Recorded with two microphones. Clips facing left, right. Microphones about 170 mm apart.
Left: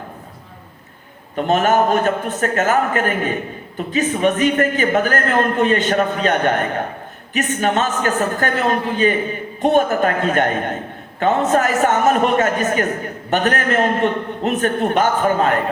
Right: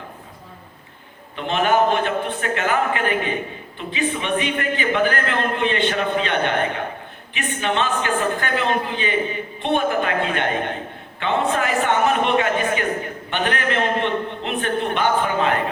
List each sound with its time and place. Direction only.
1.4 s a man's voice: 45° left (ahead or behind)